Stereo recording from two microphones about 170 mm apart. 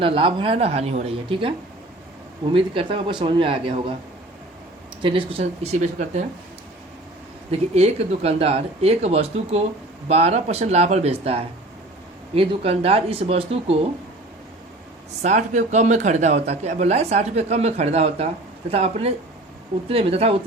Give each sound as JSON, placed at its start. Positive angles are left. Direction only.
{"t": 0.0, "sound": "speech", "side_deg": -30}
{"t": 5.0, "sound": "speech", "side_deg": -30}
{"t": 7.8, "sound": "speech", "side_deg": -35}
{"t": 15.2, "sound": "speech", "side_deg": -45}